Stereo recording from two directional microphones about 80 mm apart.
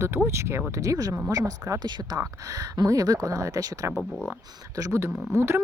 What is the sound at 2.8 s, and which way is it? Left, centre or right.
Speech, right.